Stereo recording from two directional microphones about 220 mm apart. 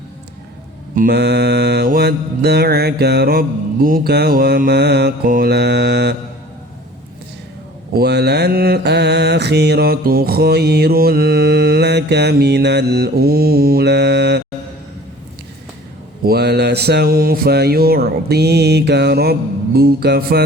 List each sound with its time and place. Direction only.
0.9 s mantra: 45° right (ahead or behind)
7.9 s mantra: 45° right (ahead or behind)
16.2 s mantra: 45° right (ahead or behind)